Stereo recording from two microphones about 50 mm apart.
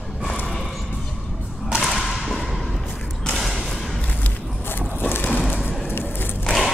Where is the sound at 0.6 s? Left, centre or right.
Centre.